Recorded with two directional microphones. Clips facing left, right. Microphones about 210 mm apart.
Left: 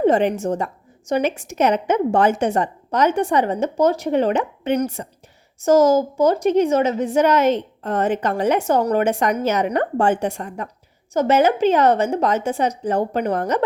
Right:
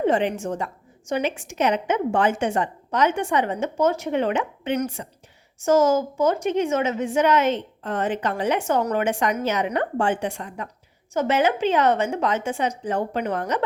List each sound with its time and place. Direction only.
0.0 s a woman's voice: 40° left (ahead or behind)